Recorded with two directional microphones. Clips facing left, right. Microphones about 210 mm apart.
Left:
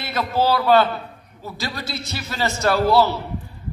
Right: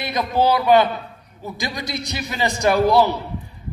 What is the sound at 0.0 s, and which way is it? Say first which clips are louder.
A man's voice: right 2 dB; 15° right (ahead or behind).